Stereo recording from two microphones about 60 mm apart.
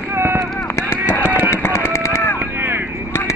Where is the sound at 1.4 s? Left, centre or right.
Left.